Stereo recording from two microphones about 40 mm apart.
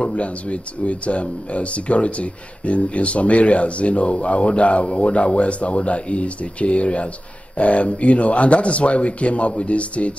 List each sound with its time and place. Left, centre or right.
0.0 s speech: left